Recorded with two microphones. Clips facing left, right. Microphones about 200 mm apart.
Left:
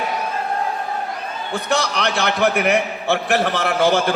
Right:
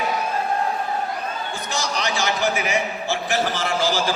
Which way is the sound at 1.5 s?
60° left (ahead or behind).